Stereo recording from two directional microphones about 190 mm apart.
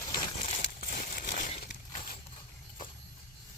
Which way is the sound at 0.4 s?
45° left (ahead or behind).